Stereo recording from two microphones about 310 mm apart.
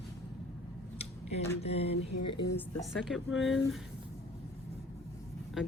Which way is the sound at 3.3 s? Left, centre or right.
Left.